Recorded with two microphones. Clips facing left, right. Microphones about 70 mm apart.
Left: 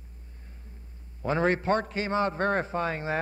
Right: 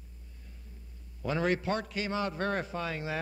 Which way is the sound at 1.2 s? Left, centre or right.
Left.